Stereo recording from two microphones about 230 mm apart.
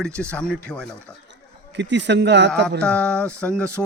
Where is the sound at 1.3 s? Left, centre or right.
Right.